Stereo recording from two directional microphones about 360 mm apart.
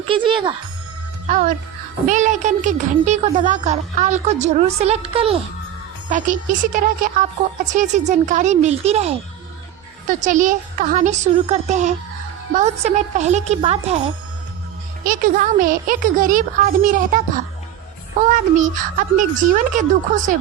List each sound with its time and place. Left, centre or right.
0.1 s a woman's voice: centre
15.0 s a child's voice: right